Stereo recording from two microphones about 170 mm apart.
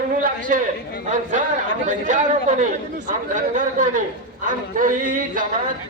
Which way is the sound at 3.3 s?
50° right (ahead or behind).